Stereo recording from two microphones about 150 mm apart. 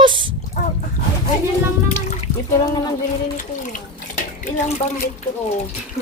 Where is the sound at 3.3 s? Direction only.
60° left (ahead or behind).